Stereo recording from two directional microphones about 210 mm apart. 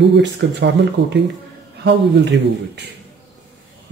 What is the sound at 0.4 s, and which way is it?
Speech, 55° right (ahead or behind).